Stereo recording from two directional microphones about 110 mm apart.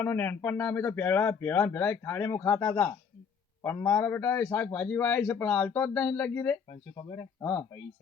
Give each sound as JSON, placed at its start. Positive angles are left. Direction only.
{"t": 0.0, "sound": "a man's voice", "side_deg": 20}
{"t": 6.9, "sound": "speech", "side_deg": 35}